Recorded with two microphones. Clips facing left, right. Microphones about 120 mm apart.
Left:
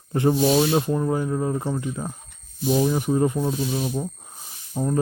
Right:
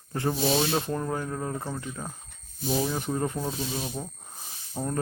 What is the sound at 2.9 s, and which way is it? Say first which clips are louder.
Speech: left 8 dB; 10° left (ahead or behind).